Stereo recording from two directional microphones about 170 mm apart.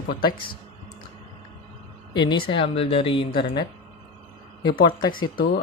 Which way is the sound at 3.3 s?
65° left (ahead or behind).